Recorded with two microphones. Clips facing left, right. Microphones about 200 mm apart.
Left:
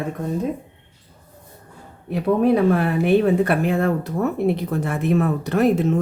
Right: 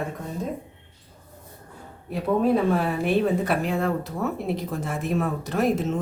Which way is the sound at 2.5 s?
60° left (ahead or behind).